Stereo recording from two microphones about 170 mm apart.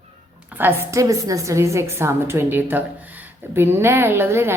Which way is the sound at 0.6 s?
15° right (ahead or behind).